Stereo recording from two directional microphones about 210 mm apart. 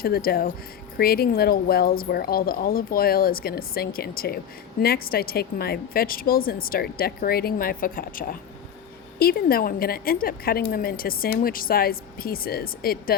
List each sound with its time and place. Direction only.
0.0 s a woman's voice: 45° left (ahead or behind)